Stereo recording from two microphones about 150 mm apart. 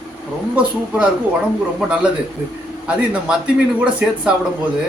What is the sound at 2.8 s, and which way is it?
Speech, 5° right (ahead or behind).